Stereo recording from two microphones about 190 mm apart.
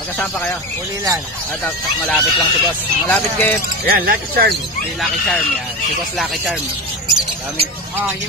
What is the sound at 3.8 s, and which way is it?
Speech, 50° right (ahead or behind).